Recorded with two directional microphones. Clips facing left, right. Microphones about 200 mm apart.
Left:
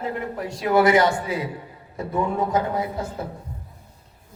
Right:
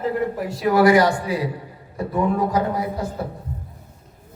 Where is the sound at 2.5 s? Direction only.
25° left (ahead or behind).